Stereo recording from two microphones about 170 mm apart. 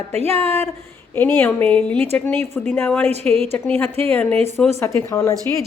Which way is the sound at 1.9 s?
35° right (ahead or behind).